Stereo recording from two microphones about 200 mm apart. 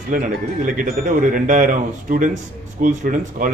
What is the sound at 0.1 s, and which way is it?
Speech, 40° right (ahead or behind).